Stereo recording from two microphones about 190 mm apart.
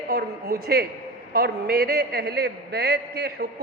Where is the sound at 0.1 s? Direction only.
55° right (ahead or behind).